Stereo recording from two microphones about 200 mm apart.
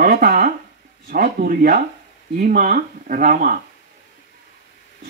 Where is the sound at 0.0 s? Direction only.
50° right (ahead or behind).